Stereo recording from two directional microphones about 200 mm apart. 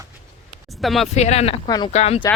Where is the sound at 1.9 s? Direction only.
30° left (ahead or behind).